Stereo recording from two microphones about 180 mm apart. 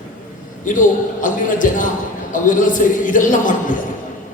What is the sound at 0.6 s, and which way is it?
A man's voice, 45° left (ahead or behind).